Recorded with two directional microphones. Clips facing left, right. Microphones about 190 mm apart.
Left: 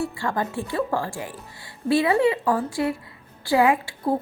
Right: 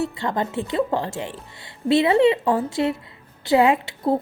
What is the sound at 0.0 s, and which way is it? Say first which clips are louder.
A woman's voice: right 2 dB; 20° right (ahead or behind).